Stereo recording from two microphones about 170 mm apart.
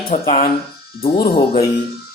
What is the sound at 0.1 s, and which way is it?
Speech, 40° left (ahead or behind).